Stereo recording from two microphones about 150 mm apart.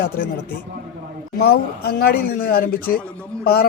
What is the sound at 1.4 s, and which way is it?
Speech, 90° left.